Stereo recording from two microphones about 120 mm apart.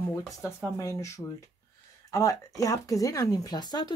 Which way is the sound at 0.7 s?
25° left (ahead or behind).